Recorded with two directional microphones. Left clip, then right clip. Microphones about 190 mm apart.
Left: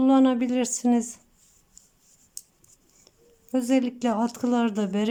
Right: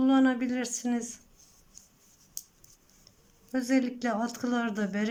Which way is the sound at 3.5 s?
20° left (ahead or behind).